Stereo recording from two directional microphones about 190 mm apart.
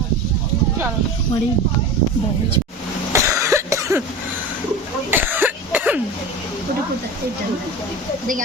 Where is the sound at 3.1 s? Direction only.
15° right (ahead or behind).